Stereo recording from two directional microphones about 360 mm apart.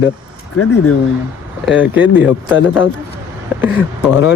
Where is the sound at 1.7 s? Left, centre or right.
Centre.